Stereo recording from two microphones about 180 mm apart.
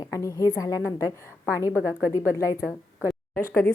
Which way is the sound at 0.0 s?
15° left (ahead or behind).